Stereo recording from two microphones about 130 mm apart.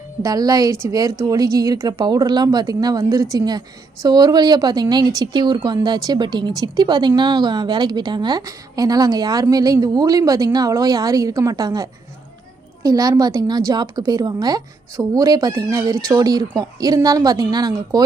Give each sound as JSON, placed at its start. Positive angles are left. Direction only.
{"t": 0.2, "sound": "a woman's voice", "side_deg": -30}